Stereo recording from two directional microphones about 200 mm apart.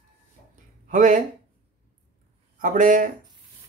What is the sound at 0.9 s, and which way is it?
Speech, 40° right (ahead or behind).